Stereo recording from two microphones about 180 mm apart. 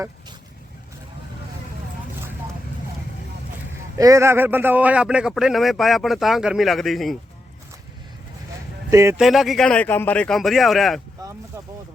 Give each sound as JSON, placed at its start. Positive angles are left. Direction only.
{"t": 3.9, "sound": "a man's voice", "side_deg": -20}
{"t": 8.9, "sound": "speech", "side_deg": -15}
{"t": 9.1, "sound": "a man's voice", "side_deg": 0}
{"t": 11.2, "sound": "speech", "side_deg": -20}